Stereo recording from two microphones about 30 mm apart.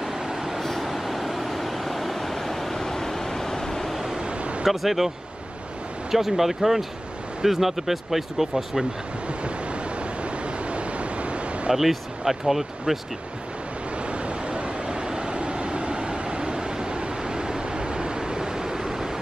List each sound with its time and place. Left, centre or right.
0.0 s vehicle: centre
0.6 s vehicle: centre
4.2 s a sound: right
4.6 s speech: centre
6.1 s speech: centre
10.4 s a sound: right
11.7 s speech: centre
14.0 s vehicle: right; by 19.1 s centre